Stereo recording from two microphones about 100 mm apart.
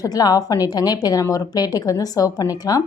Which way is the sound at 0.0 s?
40° left (ahead or behind).